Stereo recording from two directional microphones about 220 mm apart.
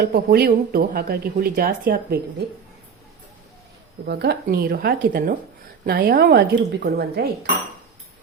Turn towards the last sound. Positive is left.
turn(degrees=-45)  # may be behind; listen again after turning